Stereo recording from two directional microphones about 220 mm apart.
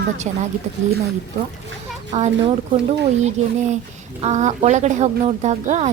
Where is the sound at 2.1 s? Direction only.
35° right (ahead or behind).